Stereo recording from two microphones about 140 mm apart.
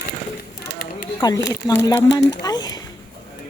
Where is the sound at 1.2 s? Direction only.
25° left (ahead or behind).